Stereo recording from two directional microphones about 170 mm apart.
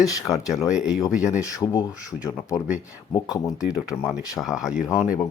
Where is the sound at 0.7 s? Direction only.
5° right (ahead or behind).